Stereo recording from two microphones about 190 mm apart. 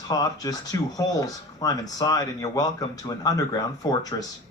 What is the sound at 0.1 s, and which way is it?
Speech, 20° left (ahead or behind).